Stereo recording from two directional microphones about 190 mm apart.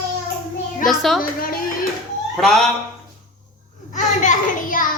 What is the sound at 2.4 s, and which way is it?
Speech, centre (ahead or behind).